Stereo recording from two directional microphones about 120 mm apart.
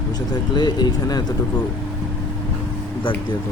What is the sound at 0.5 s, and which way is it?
Speech, 35° left (ahead or behind).